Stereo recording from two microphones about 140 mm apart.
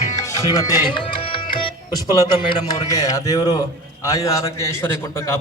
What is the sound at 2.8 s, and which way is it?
A man's voice, 25° left (ahead or behind).